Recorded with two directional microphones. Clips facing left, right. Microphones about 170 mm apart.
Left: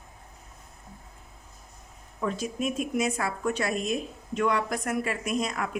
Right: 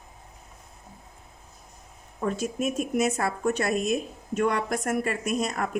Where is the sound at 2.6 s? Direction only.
45° right (ahead or behind).